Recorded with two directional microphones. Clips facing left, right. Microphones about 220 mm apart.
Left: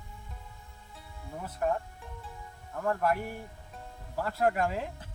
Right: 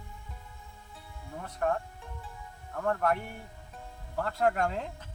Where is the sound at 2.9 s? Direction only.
5° left (ahead or behind).